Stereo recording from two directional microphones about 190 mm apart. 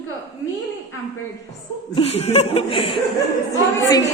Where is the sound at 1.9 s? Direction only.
30° left (ahead or behind).